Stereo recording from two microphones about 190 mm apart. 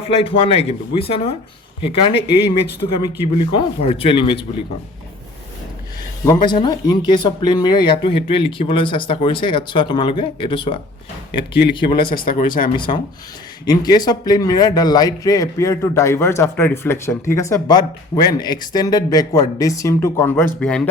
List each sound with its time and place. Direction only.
0.1 s speech: 30° left (ahead or behind)
6.2 s speech: 20° left (ahead or behind)
11.9 s speech: 50° left (ahead or behind)
12.7 s a man's voice: 25° left (ahead or behind); by 20.8 s 5° left (ahead or behind)